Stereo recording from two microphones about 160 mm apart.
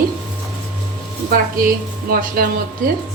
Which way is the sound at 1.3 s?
65° right (ahead or behind).